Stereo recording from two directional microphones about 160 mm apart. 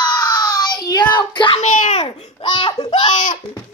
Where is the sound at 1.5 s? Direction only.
50° left (ahead or behind); by 3.1 s 30° left (ahead or behind).